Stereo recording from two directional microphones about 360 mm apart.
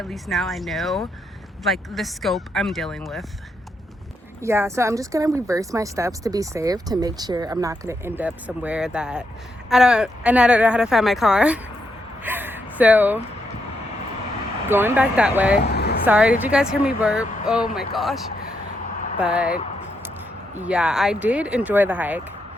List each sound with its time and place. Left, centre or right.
0.0 s speech: centre
4.4 s speech: centre
12.2 s gasp: centre
14.7 s speech: centre
15.6 s a sound: left
16.0 s speech: centre
19.2 s speech: centre
20.6 s speech: centre